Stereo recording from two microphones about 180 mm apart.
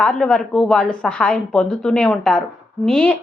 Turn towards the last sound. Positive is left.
turn(degrees=5)  # may be behind; listen again after turning